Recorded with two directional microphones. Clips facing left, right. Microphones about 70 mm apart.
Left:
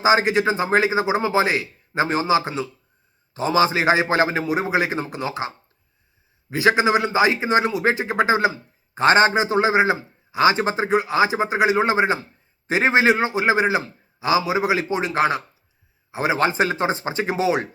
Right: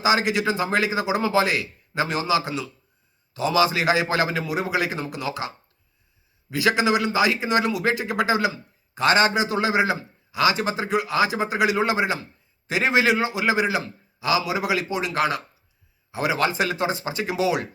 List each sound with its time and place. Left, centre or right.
0.0 s a man's voice: left